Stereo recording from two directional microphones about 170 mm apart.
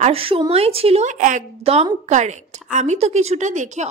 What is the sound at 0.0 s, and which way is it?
A woman's voice, 35° right (ahead or behind).